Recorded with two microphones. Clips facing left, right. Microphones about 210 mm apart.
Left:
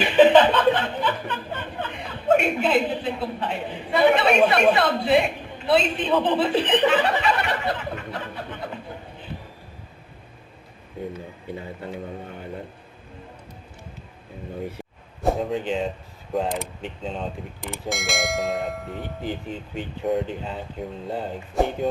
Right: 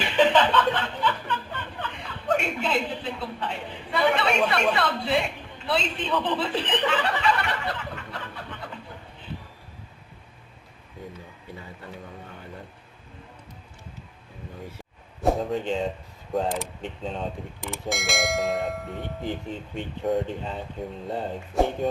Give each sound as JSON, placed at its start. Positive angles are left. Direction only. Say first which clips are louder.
{"t": 0.0, "sound": "chuckle", "louder": "left 6 dB", "side_deg": 15}
{"t": 2.6, "sound": "a woman's voice", "louder": "left 6 dB", "side_deg": 15}
{"t": 6.8, "sound": "a sound", "louder": "left 4 dB", "side_deg": 20}
{"t": 15.2, "sound": "speech", "louder": "left 1 dB", "side_deg": 0}